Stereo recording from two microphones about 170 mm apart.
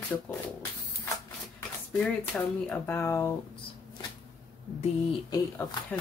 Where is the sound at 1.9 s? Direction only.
5° left (ahead or behind).